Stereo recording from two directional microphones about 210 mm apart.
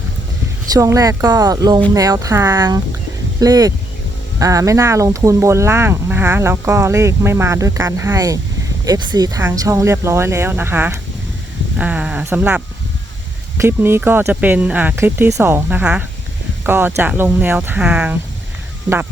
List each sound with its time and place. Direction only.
0.7 s speech: 15° right (ahead or behind)